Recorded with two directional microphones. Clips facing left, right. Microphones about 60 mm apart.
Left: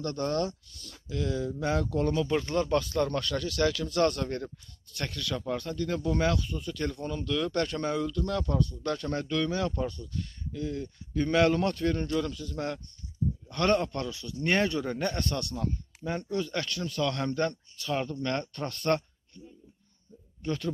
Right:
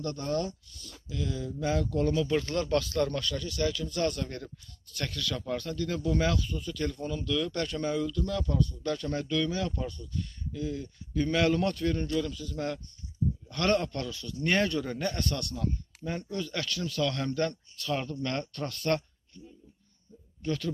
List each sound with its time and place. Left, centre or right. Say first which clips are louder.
0.0 s speech: left 2 dB; left
2.0 s speech: even; left
2.3 s speech: left 1 dB; centre
3.1 s speech: left 2 dB; left
3.3 s speech: left 5 dB; left
4.9 s speech: even; left
13.8 s speech: left 1 dB; left
20.4 s speech: even; left